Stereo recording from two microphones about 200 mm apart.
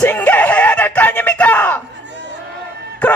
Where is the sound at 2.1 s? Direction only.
60° right (ahead or behind).